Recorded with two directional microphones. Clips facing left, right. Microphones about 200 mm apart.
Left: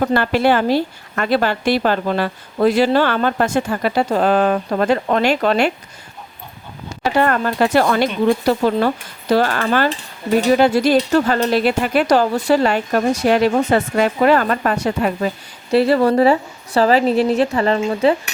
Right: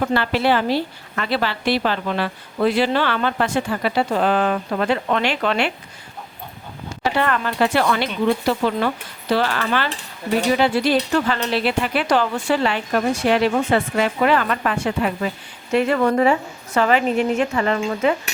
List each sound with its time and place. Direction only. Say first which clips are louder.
0.0 s a woman's voice: left 4 dB; 45° left (ahead or behind)
7.1 s a woman's voice: left 5 dB; 45° left (ahead or behind)